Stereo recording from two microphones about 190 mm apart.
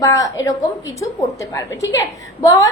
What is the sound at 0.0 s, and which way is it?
A woman's voice, 15° left (ahead or behind).